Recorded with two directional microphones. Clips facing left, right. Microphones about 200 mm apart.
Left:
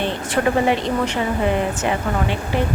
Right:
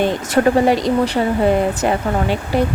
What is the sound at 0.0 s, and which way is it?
A woman's voice, 40° right (ahead or behind).